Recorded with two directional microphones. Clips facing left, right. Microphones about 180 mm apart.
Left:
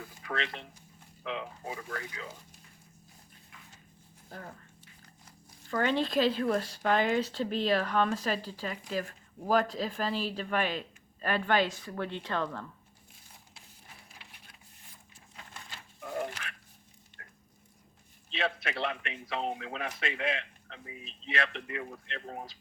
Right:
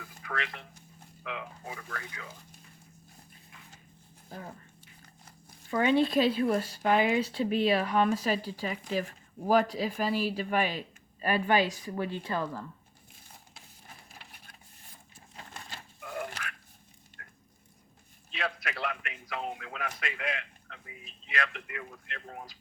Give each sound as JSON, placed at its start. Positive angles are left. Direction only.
{"t": 0.3, "sound": "a man's voice", "side_deg": 25}
{"t": 4.3, "sound": "speech", "side_deg": -10}
{"t": 5.7, "sound": "speech", "side_deg": -10}
{"t": 14.1, "sound": "wood", "side_deg": -45}
{"t": 15.4, "sound": "a sound", "side_deg": -35}
{"t": 16.0, "sound": "a sound", "side_deg": 30}
{"t": 18.3, "sound": "a man's voice", "side_deg": 25}